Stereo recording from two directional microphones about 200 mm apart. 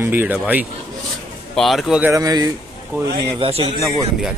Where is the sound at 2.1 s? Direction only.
15° right (ahead or behind).